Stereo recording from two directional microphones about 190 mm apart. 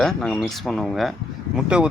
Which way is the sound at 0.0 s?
5° left (ahead or behind).